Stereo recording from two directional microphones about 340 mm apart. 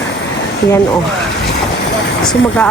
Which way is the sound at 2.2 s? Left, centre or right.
Centre.